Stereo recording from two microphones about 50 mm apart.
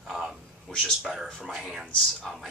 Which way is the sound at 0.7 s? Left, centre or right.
Centre.